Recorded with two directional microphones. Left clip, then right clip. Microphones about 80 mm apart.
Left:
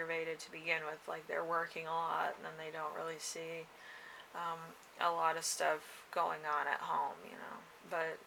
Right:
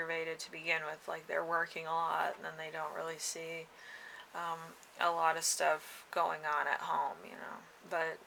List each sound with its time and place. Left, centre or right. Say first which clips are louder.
0.1 s speech: right 1 dB; right